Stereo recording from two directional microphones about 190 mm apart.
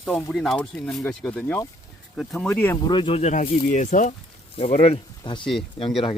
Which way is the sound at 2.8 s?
25° left (ahead or behind).